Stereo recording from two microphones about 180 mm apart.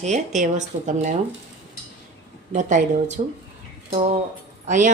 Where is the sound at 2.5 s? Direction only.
45° right (ahead or behind).